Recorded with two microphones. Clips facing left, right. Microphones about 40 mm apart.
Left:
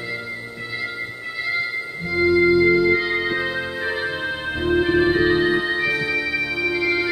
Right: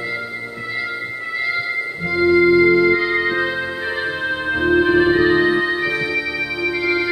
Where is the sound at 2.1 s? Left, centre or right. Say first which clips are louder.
Right 3 dB; right.